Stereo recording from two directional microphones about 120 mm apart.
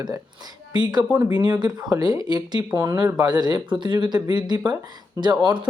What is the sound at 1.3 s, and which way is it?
Speech, 40° right (ahead or behind).